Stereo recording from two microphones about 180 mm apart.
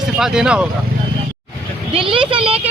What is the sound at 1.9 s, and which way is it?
Speech, 30° right (ahead or behind).